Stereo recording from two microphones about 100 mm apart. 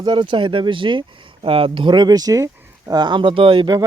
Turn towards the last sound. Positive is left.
turn(degrees=-50)  # may be behind; listen again after turning